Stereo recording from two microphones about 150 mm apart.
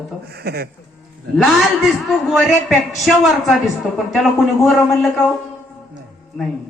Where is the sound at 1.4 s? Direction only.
Centre (ahead or behind).